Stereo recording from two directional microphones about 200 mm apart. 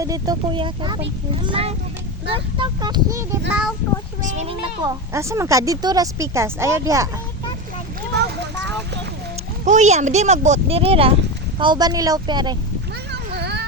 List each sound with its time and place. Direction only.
0.0 s speech: 20° right (ahead or behind)
3.5 s speech: 5° right (ahead or behind)
4.2 s speech: 35° right (ahead or behind)
4.9 s speech: 15° right (ahead or behind)
9.6 s speech: 35° right (ahead or behind); by 12.5 s 20° right (ahead or behind)
13.1 s a sound: 55° right (ahead or behind)